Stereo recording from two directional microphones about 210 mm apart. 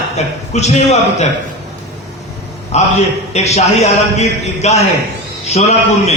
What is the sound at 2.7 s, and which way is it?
A man's voice, 30° left (ahead or behind).